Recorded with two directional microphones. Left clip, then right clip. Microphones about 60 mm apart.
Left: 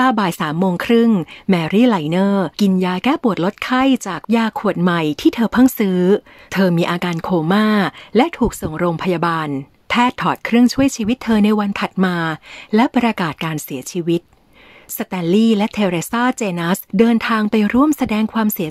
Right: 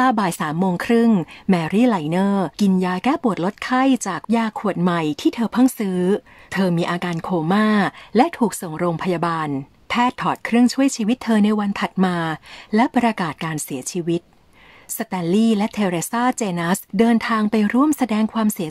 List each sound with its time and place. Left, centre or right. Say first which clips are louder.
0.0 s a woman's voice: left 2 dB; left
4.1 s a woman's voice: left 3 dB; left
5.3 s speech: left 5 dB; left
5.7 s a woman's voice: left 5 dB; left
8.1 s speech: left 2 dB; centre
8.7 s a woman's voice: left 4 dB; left
9.8 s a woman's voice: left 3 dB; left
11.4 s a woman's voice: left 4 dB; left
11.7 s a woman's voice: left 2 dB; centre
17.2 s a woman's voice: left 3 dB; left
18.3 s a woman's voice: left 3 dB; left